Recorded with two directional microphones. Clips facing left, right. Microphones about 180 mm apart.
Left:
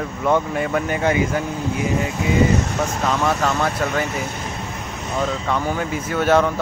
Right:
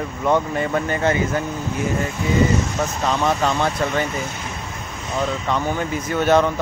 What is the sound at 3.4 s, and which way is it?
Speech, centre (ahead or behind).